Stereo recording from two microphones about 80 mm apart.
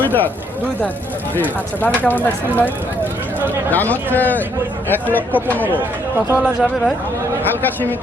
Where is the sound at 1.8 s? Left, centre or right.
Left.